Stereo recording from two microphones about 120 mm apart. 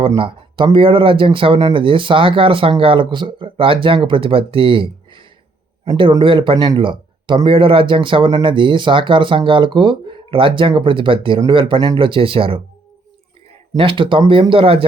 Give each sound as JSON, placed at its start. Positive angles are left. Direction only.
{"t": 0.2, "sound": "speech", "side_deg": -45}
{"t": 13.7, "sound": "speech", "side_deg": -45}